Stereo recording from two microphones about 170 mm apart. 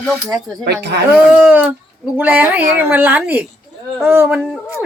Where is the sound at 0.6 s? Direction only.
75° right (ahead or behind).